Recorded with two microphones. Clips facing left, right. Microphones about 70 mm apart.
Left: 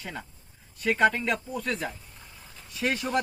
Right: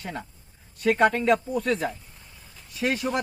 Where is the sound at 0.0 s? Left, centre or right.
Right.